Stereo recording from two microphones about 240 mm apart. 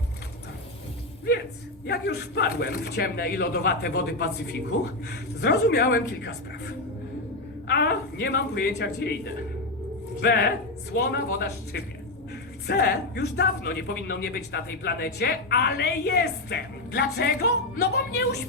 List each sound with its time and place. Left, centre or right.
1.9 s a man's voice: left
5.4 s a man's voice: left
7.7 s a man's voice: left